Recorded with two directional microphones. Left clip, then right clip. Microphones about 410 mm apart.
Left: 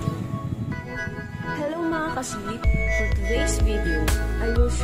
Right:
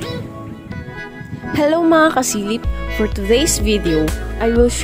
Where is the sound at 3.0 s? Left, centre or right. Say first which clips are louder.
Right 10 dB; centre.